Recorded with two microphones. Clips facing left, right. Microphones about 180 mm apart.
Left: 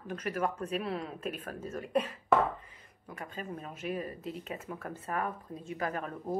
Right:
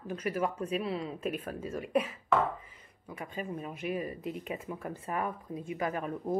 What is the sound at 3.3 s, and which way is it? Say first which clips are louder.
A woman's voice: right 4 dB; 10° right (ahead or behind).